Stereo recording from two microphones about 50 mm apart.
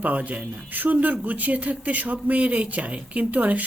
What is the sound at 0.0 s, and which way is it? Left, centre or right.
Speech, right.